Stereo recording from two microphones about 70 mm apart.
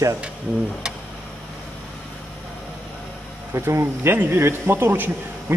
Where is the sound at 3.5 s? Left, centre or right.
Right.